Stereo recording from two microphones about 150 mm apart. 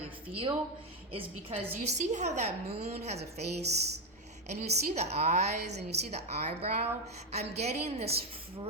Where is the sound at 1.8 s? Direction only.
55° right (ahead or behind).